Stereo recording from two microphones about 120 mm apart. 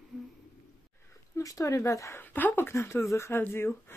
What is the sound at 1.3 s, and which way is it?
Speech, 30° left (ahead or behind).